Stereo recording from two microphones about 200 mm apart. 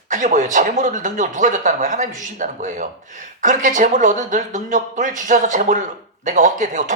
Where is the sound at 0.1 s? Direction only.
40° right (ahead or behind).